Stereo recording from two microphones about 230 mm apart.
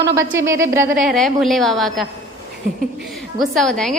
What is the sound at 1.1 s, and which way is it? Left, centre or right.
A woman's voice, centre.